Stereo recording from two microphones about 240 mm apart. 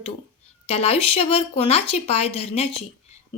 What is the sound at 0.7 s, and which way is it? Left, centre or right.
A woman's voice, left.